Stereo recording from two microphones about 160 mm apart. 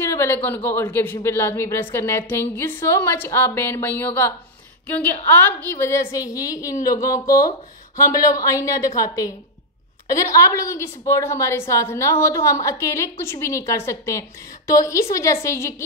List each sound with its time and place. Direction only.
0.0 s a woman's voice: 15° left (ahead or behind)
5.6 s a woman's voice: 15° left (ahead or behind)